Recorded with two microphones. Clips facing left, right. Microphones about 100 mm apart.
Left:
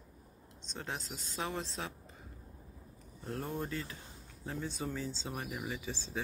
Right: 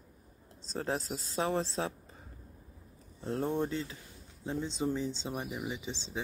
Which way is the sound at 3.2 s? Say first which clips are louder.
Right 7 dB; 30° right (ahead or behind).